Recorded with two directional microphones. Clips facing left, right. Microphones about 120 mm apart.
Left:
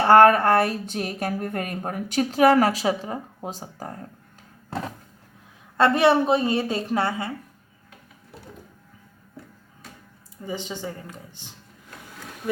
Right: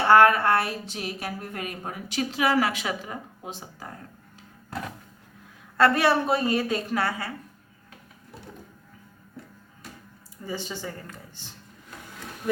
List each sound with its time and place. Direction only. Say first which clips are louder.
0.0 s speech: left 3 dB; 40° left (ahead or behind)
5.7 s a woman's voice: left 3 dB; 25° left (ahead or behind)
10.4 s speech: left 2 dB; 20° left (ahead or behind)